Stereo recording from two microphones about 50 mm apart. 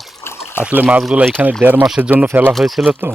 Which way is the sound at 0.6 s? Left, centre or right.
Left.